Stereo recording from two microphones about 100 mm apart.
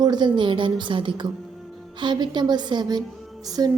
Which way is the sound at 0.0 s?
45° right (ahead or behind).